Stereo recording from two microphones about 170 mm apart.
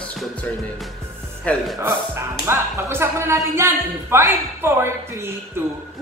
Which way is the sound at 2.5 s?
15° right (ahead or behind).